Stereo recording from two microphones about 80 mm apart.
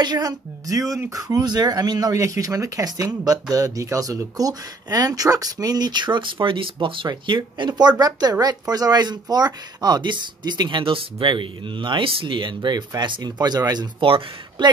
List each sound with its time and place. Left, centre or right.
0.0 s speech: right
8.0 s speech: right
13.9 s speech: right